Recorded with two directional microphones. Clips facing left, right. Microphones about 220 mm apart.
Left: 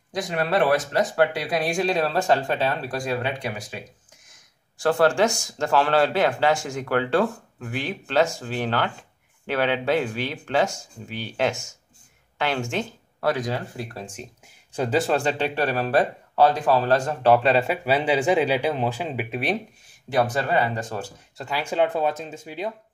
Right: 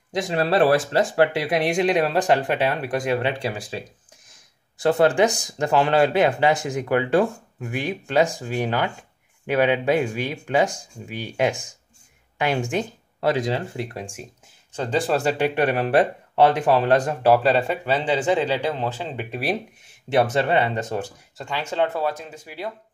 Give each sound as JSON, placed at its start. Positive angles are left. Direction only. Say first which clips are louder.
{"t": 0.1, "sound": "speech", "louder": "right 3 dB", "side_deg": -25}
{"t": 4.7, "sound": "speech", "louder": "right 2 dB", "side_deg": -20}
{"t": 14.8, "sound": "speech", "louder": "even", "side_deg": 5}
{"t": 19.9, "sound": "speech", "louder": "right 3 dB", "side_deg": -25}
{"t": 21.4, "sound": "speech", "louder": "left 1 dB", "side_deg": 10}